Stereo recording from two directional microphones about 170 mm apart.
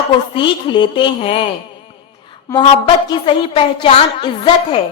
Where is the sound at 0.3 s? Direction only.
30° left (ahead or behind).